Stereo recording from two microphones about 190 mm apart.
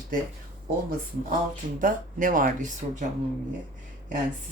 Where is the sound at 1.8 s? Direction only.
45° right (ahead or behind).